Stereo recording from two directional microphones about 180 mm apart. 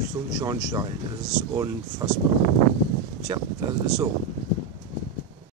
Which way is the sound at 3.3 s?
20° right (ahead or behind).